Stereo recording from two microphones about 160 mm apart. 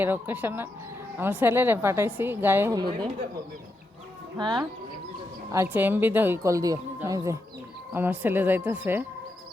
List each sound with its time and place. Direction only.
0.0 s speech: 10° right (ahead or behind)
2.7 s speech: 25° right (ahead or behind)
4.4 s speech: 25° right (ahead or behind)
5.5 s speech: 15° right (ahead or behind)